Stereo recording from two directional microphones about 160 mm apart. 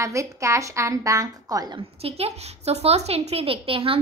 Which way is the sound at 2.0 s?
40° right (ahead or behind).